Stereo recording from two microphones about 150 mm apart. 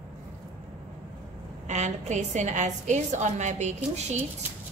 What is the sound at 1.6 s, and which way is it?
A woman's voice, 50° right (ahead or behind).